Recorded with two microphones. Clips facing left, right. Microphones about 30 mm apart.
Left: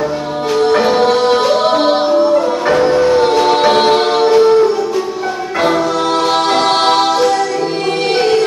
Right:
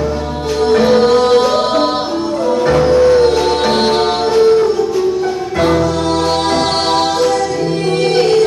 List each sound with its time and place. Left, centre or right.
0.6 s music: centre
7.0 s music: centre